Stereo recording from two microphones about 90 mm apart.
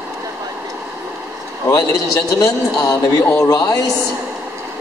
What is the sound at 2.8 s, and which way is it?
Speech, 40° left (ahead or behind).